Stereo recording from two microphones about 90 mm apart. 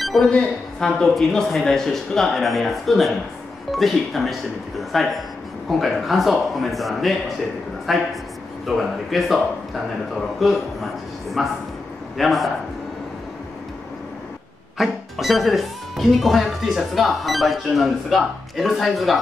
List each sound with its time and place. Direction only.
0.0 s speech: centre (ahead or behind)
10.4 s a sound: centre (ahead or behind)
12.2 s speech: centre (ahead or behind)
14.8 s speech: centre (ahead or behind)